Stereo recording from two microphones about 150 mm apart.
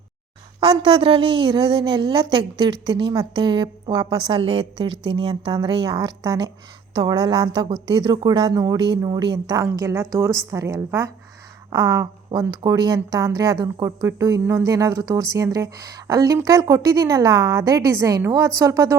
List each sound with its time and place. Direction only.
0.6 s a woman's voice: 35° right (ahead or behind)